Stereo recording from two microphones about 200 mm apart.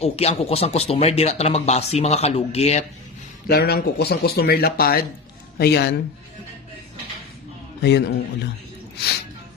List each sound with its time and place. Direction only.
0.0 s speech: 30° left (ahead or behind)
3.4 s a man's voice: 50° left (ahead or behind)
7.8 s a man's voice: 55° left (ahead or behind)